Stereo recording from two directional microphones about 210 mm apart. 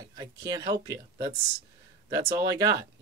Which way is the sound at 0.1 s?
20° right (ahead or behind).